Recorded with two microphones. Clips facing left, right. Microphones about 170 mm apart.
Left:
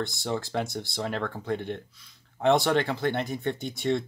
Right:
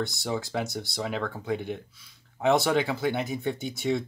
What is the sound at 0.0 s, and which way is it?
Speech, centre (ahead or behind).